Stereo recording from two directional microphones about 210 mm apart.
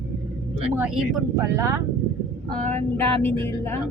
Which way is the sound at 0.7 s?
5° right (ahead or behind).